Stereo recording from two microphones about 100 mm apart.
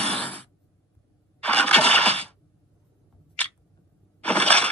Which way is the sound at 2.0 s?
90° right.